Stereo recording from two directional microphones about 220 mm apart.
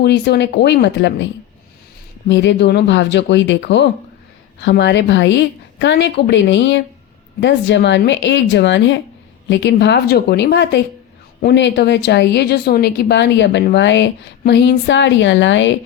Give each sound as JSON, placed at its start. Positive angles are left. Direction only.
{"t": 0.0, "sound": "a woman's voice", "side_deg": 50}
{"t": 2.3, "sound": "a woman's voice", "side_deg": 50}